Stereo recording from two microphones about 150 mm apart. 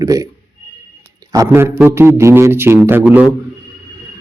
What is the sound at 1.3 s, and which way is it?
A man's voice, 20° right (ahead or behind).